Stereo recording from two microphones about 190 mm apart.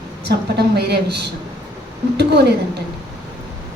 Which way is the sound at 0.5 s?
60° right (ahead or behind).